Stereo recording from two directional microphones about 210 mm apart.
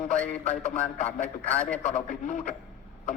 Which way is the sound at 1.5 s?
5° left (ahead or behind).